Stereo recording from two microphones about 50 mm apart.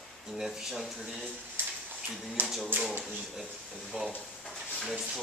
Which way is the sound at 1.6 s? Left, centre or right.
Right.